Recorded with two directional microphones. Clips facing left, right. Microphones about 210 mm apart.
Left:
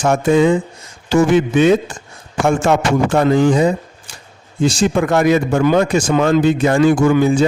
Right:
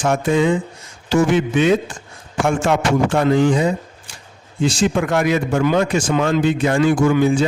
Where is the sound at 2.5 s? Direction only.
45° left (ahead or behind).